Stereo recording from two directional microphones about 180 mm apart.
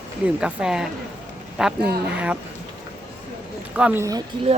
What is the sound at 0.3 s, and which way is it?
Speech, 5° right (ahead or behind).